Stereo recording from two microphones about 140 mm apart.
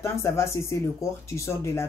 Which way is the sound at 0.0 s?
20° left (ahead or behind).